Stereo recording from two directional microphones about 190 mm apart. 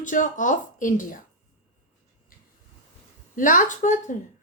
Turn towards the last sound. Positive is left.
turn(degrees=40)  # may be behind; listen again after turning